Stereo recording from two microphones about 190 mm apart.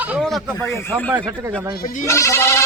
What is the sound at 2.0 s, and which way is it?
Speech, 15° left (ahead or behind).